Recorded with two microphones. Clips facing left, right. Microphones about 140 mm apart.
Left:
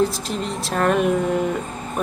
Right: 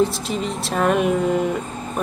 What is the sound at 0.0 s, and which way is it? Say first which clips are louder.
A woman's voice: right 1 dB; centre (ahead or behind).